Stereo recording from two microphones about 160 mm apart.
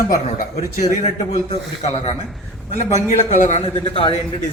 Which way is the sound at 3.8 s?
30° left (ahead or behind).